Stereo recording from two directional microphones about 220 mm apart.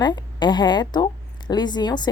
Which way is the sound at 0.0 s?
20° left (ahead or behind).